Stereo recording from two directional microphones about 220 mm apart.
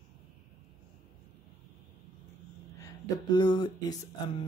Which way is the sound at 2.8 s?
20° left (ahead or behind).